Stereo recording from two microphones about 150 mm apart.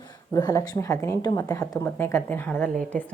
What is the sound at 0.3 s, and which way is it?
A woman's voice, 25° left (ahead or behind).